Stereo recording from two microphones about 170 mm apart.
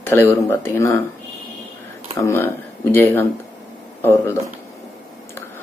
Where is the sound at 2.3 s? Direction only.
15° left (ahead or behind).